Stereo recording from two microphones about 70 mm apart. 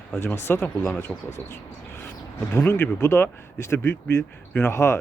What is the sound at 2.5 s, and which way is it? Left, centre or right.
Speech, left.